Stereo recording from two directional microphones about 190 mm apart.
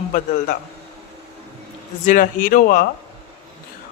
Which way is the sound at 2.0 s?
45° left (ahead or behind).